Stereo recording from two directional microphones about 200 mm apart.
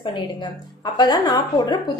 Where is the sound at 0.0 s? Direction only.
20° left (ahead or behind).